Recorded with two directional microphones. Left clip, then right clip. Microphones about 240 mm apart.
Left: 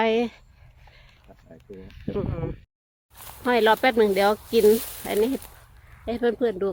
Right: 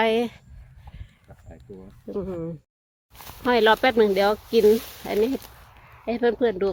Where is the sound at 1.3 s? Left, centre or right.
Right.